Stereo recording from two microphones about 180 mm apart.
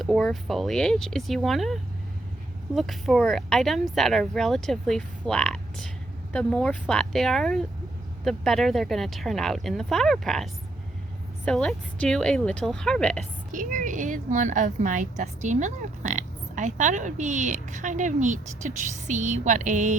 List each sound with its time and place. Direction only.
0.0 s speech: centre (ahead or behind)
13.5 s a woman's voice: 45° right (ahead or behind)